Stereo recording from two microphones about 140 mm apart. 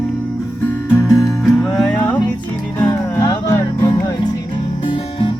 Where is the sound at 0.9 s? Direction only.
20° left (ahead or behind).